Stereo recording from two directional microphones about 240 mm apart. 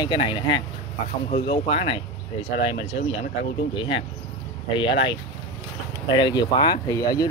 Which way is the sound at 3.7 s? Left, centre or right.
Left.